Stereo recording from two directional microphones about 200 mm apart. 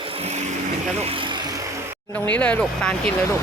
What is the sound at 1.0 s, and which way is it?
Vehicle, 25° right (ahead or behind).